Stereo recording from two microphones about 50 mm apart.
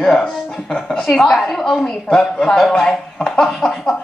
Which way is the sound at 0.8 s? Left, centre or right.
Centre.